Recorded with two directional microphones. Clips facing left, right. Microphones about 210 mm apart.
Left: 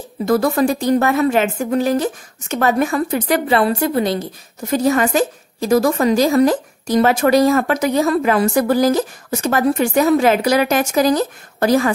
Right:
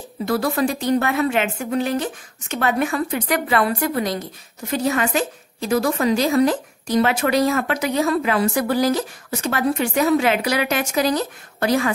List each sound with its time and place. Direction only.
0.2 s a woman's voice: 45° left (ahead or behind); by 4.2 s 30° left (ahead or behind)
4.6 s a woman's voice: 45° left (ahead or behind)